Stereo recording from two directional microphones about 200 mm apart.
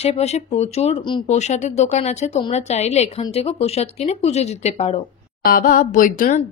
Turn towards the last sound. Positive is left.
turn(degrees=40)  # may be behind; listen again after turning